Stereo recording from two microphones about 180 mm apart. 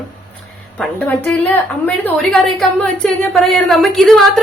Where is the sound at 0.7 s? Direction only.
10° left (ahead or behind).